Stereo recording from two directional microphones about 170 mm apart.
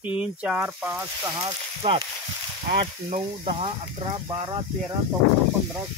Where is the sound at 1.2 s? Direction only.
20° right (ahead or behind).